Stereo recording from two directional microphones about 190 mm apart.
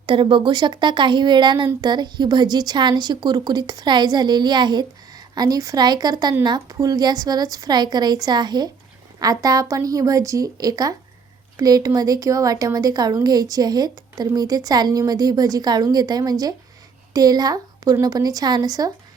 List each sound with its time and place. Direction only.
0.0 s speech: 25° right (ahead or behind)